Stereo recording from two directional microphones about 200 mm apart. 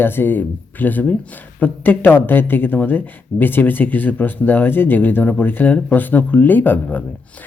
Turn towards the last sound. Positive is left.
turn(degrees=10)  # may be behind; listen again after turning